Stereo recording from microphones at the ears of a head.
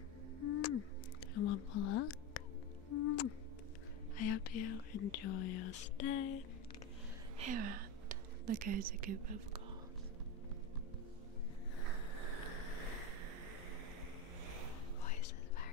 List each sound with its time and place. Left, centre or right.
0.4 s music: left
1.3 s whispering: left
2.9 s music: left
4.2 s speech: left
7.3 s speech: right